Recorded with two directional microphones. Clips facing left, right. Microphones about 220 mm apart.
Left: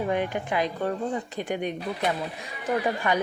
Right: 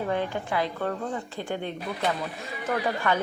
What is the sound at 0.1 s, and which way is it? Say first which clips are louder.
Speech: left 1 dB; 15° left (ahead or behind).